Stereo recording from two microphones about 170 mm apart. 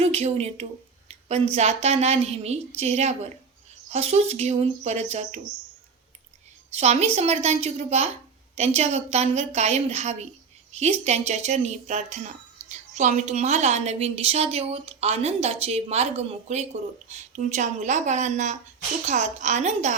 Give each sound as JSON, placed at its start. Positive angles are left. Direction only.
{"t": 0.0, "sound": "a woman's voice", "side_deg": -40}
{"t": 6.7, "sound": "a woman's voice", "side_deg": -40}